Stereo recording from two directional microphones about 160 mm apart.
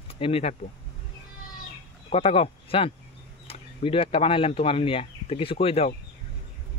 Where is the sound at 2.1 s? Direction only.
40° left (ahead or behind).